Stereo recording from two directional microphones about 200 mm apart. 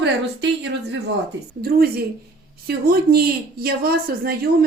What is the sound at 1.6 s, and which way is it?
A woman's voice, 50° right (ahead or behind).